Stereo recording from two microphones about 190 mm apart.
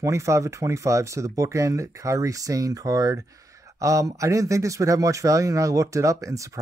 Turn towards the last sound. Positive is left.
turn(degrees=-15)  # may be behind; listen again after turning